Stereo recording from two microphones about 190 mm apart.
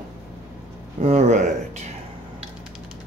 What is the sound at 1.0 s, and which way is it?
Speech, 35° right (ahead or behind).